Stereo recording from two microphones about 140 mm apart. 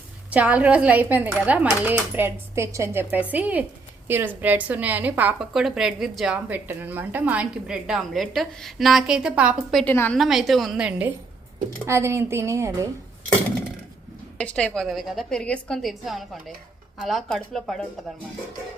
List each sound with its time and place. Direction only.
0.3 s a woman's voice: 10° right (ahead or behind)
9.8 s a woman's voice: 15° left (ahead or behind)
10.2 s a woman's voice: centre (ahead or behind)
11.9 s a woman's voice: 20° right (ahead or behind)
14.3 s a woman's voice: 10° left (ahead or behind)